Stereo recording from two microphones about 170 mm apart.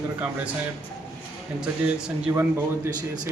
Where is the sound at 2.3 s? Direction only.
20° right (ahead or behind).